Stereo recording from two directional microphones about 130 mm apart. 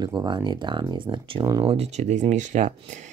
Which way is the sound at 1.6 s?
50° right (ahead or behind).